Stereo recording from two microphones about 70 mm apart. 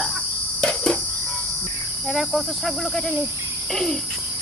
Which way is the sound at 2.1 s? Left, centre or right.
Centre.